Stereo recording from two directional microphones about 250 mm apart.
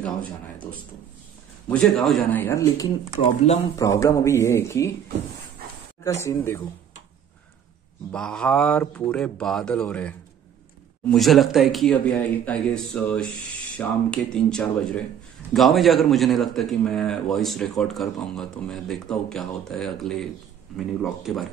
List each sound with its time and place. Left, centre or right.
0.0 s a man's voice: centre
6.2 s speech: centre
8.1 s a man's voice: centre